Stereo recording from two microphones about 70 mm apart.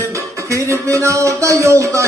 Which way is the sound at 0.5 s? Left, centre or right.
Right.